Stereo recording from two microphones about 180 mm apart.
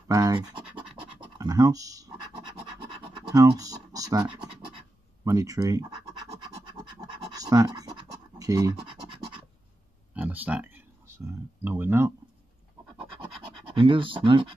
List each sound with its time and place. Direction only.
0.1 s speech: 20° right (ahead or behind)
2.8 s scratch: 25° right (ahead or behind)
5.2 s speech: 20° right (ahead or behind)
7.0 s scratch: 20° right (ahead or behind)
10.1 s a sound: 10° right (ahead or behind)
13.7 s speech: 30° right (ahead or behind)